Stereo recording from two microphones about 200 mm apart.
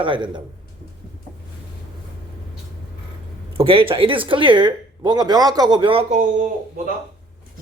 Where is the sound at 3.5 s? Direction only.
25° right (ahead or behind).